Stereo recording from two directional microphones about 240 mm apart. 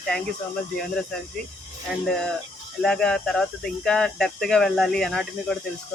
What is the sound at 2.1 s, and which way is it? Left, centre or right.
Speech, centre.